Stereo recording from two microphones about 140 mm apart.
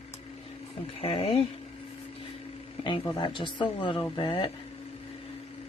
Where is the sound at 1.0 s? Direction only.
40° left (ahead or behind).